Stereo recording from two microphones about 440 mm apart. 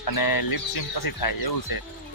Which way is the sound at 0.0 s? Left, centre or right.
Left.